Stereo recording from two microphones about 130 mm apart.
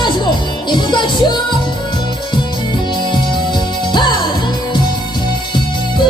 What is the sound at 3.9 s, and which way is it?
Music, 35° left (ahead or behind).